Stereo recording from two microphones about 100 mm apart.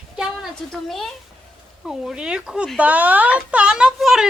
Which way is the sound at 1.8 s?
5° right (ahead or behind).